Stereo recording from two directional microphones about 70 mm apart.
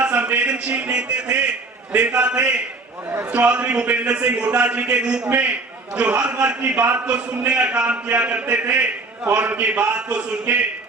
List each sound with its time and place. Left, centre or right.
0.0 s a sound: right
1.9 s a man's voice: right
6.6 s a man's voice: right